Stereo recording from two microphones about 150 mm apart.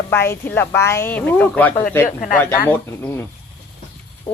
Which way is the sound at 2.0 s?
60° left (ahead or behind).